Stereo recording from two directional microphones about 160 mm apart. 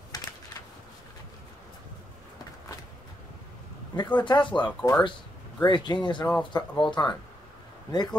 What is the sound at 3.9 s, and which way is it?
Speech, 30° left (ahead or behind).